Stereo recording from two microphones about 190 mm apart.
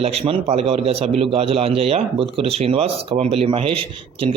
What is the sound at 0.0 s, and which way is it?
A man's voice, 30° right (ahead or behind).